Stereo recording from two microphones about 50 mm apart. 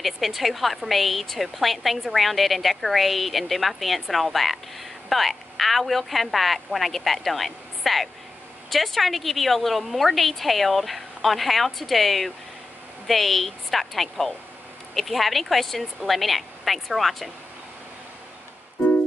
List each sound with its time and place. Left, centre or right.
0.0 s a woman's voice: centre